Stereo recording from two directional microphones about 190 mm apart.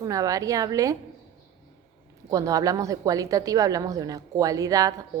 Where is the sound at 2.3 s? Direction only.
20° right (ahead or behind).